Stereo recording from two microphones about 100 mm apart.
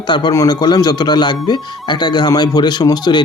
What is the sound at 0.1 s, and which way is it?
Speech, 45° left (ahead or behind).